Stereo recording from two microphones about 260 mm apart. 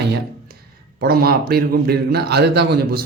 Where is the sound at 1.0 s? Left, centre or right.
Right.